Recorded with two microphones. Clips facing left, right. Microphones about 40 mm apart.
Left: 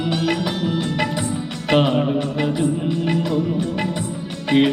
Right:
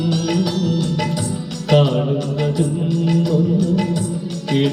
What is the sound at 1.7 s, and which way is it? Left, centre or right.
Music, left.